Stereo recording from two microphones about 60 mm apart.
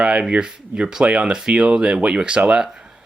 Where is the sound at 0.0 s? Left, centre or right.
Centre.